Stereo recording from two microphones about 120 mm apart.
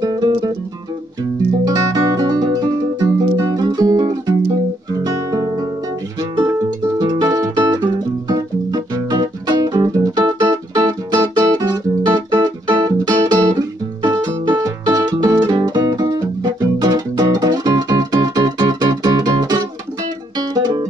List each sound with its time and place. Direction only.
0.0 s music: 35° right (ahead or behind)
1.6 s music: 30° right (ahead or behind)